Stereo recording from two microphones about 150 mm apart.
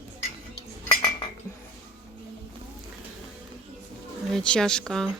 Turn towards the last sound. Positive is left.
turn(degrees=5)  # may be behind; listen again after turning